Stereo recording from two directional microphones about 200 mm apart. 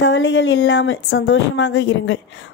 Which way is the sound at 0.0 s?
65° left (ahead or behind).